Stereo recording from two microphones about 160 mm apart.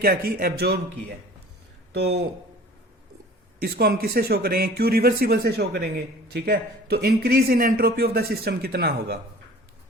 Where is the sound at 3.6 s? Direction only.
70° right (ahead or behind); by 9.1 s 90° right.